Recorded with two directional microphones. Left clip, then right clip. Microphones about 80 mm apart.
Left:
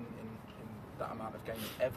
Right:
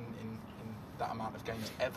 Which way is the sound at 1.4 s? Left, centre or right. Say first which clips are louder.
Left 2 dB; left.